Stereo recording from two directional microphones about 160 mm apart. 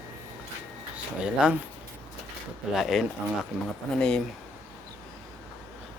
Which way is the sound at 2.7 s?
Centre (ahead or behind).